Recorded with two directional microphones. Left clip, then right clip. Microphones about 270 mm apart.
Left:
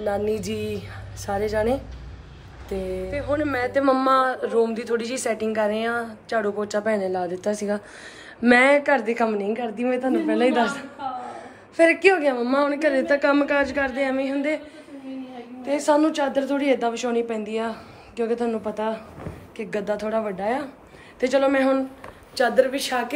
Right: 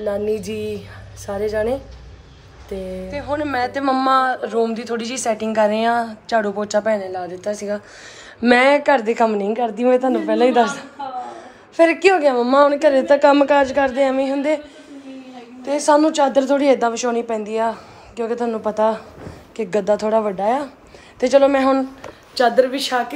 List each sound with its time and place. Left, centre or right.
0.0 s a woman's voice: centre
15.6 s a woman's voice: centre